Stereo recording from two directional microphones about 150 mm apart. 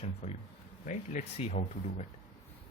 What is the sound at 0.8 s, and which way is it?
Speech, 55° left (ahead or behind).